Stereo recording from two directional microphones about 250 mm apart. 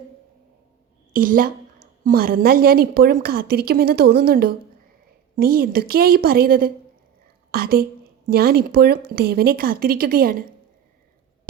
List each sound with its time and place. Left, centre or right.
1.1 s a woman's voice: right